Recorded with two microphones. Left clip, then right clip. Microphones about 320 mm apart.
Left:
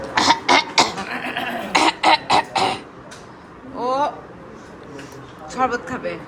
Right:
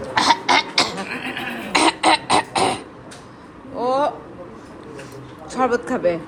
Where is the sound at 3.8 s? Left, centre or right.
Centre.